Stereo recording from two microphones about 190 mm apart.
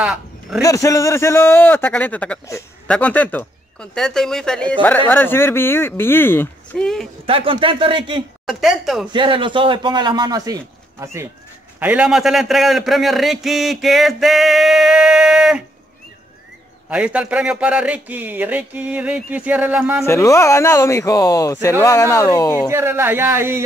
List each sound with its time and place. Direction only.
0.0 s a sound: 5° right (ahead or behind)
0.6 s a man's voice: 15° left (ahead or behind)
7.2 s a man's voice: 30° right (ahead or behind)
8.5 s a man's voice: centre (ahead or behind)
9.1 s a man's voice: 25° right (ahead or behind)
11.8 s a man's voice: 5° right (ahead or behind)
16.9 s speech: 5° right (ahead or behind)
20.1 s speech: 15° left (ahead or behind)
22.7 s speech: 15° right (ahead or behind)